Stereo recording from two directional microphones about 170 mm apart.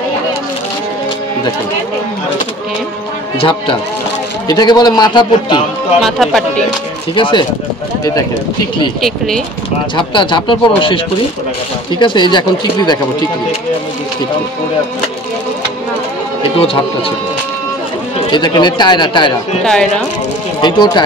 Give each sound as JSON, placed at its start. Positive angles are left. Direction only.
{"t": 3.3, "sound": "a man's voice", "side_deg": 30}
{"t": 6.0, "sound": "speech", "side_deg": 0}
{"t": 7.2, "sound": "a man's voice", "side_deg": 30}
{"t": 9.9, "sound": "a man's voice", "side_deg": 30}
{"t": 12.0, "sound": "a man's voice", "side_deg": 30}
{"t": 18.3, "sound": "a man's voice", "side_deg": 25}
{"t": 19.6, "sound": "speech", "side_deg": 5}
{"t": 20.6, "sound": "a man's voice", "side_deg": 25}